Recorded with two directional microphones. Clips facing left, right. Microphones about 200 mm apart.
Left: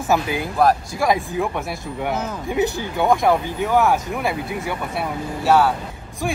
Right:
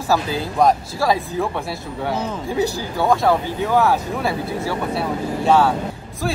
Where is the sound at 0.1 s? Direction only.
20° left (ahead or behind).